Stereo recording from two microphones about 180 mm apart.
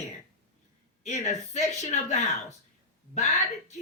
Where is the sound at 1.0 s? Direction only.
40° left (ahead or behind).